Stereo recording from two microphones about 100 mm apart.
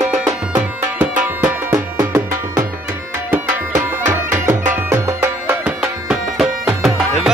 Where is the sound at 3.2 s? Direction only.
15° right (ahead or behind).